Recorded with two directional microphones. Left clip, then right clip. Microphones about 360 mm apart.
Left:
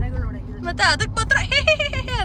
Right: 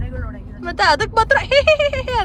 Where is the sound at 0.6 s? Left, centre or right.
Centre.